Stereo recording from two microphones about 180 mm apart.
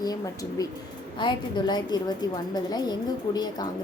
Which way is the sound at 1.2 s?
25° left (ahead or behind).